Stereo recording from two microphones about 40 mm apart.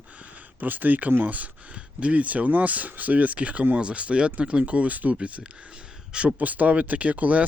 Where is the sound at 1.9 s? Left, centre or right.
Right.